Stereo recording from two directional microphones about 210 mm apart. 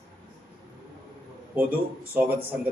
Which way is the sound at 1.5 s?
5° right (ahead or behind).